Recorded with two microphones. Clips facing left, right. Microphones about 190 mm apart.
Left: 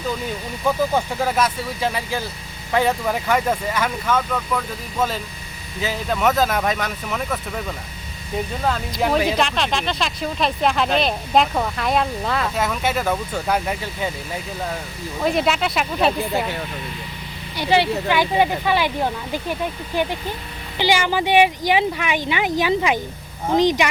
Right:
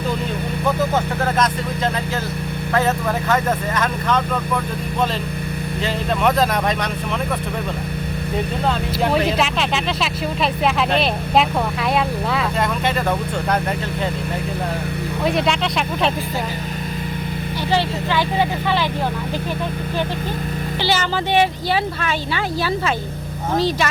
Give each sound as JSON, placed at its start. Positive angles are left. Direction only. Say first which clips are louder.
{"t": 0.9, "sound": "speech", "louder": "right 1 dB", "side_deg": 10}
{"t": 5.8, "sound": "speech", "louder": "right 1 dB", "side_deg": 0}
{"t": 8.6, "sound": "speech", "louder": "even", "side_deg": 0}
{"t": 15.2, "sound": "speech", "louder": "even", "side_deg": 0}
{"t": 17.7, "sound": "speech", "louder": "left 3 dB", "side_deg": 15}
{"t": 20.7, "sound": "speech", "louder": "left 3 dB", "side_deg": 15}